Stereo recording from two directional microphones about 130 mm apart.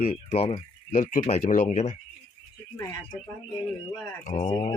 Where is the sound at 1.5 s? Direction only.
75° left (ahead or behind).